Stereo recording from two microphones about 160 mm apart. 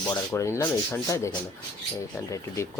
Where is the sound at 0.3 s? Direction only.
20° left (ahead or behind).